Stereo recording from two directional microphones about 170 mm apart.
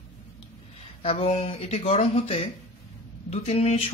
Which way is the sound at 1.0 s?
35° left (ahead or behind).